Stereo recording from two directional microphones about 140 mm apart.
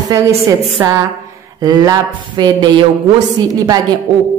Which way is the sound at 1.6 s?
25° right (ahead or behind).